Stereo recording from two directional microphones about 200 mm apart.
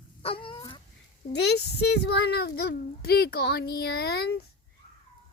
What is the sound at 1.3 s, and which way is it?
Speech, 55° left (ahead or behind).